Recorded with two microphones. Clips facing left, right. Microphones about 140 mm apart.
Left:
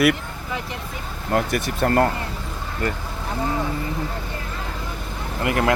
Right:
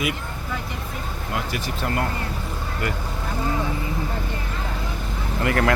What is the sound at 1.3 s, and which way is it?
Speech, 50° left (ahead or behind).